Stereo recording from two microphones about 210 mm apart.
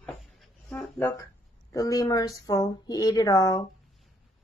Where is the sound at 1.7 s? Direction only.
15° left (ahead or behind).